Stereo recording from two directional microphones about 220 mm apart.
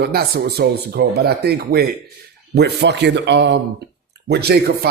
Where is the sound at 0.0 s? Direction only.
45° right (ahead or behind).